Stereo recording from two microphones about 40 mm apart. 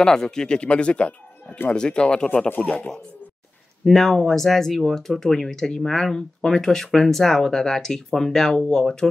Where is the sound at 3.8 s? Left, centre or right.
Centre.